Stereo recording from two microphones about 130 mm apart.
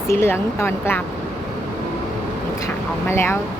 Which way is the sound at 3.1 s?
20° left (ahead or behind).